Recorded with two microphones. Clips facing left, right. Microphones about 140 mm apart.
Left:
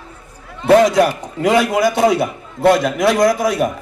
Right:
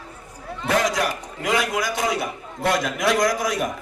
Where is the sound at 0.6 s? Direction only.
30° left (ahead or behind).